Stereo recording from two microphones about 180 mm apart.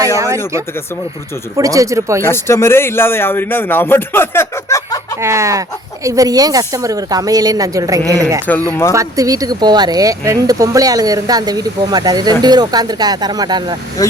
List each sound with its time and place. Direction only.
1.5 s speech: 20° right (ahead or behind)
2.2 s a man's voice: 15° left (ahead or behind)
5.2 s speech: 15° right (ahead or behind)
8.5 s a man's voice: 10° left (ahead or behind)
8.9 s speech: 20° right (ahead or behind)